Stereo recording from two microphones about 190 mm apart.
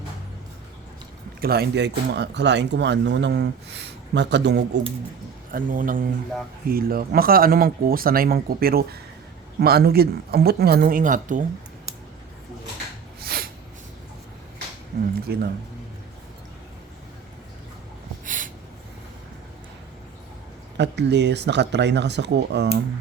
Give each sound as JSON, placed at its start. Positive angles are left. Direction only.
{"t": 1.4, "sound": "speech", "side_deg": -55}
{"t": 5.5, "sound": "speech", "side_deg": -45}
{"t": 13.2, "sound": "snort", "side_deg": -50}
{"t": 14.9, "sound": "a sound", "side_deg": -55}
{"t": 15.3, "sound": "speech", "side_deg": -60}
{"t": 18.3, "sound": "a sound", "side_deg": -45}
{"t": 20.7, "sound": "speech", "side_deg": -65}